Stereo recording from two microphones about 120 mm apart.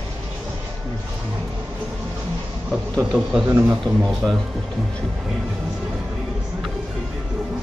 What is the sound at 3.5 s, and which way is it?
Speech, 20° right (ahead or behind).